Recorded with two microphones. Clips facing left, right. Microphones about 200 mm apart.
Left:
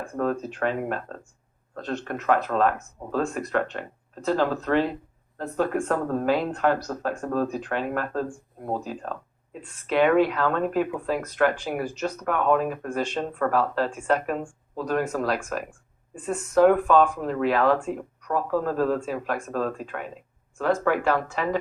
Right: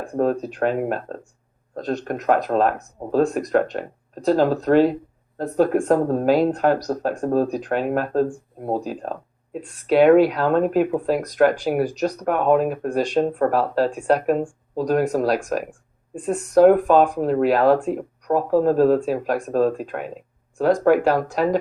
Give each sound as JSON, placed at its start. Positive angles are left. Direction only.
{"t": 0.1, "sound": "speech", "side_deg": -35}